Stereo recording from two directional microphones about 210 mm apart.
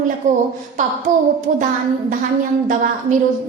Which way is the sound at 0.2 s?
35° right (ahead or behind).